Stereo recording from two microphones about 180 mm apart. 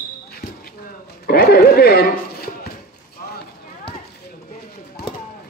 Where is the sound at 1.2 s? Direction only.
60° left (ahead or behind).